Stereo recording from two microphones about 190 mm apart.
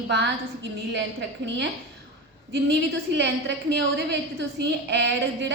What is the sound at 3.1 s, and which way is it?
A woman's voice, 65° right (ahead or behind).